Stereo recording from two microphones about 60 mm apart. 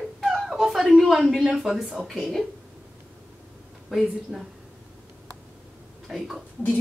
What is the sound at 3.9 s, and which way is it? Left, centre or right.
Speech, centre.